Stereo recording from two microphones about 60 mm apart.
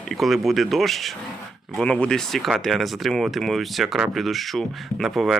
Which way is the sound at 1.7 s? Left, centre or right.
Centre.